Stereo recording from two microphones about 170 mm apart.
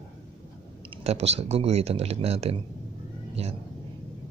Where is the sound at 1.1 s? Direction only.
40° right (ahead or behind).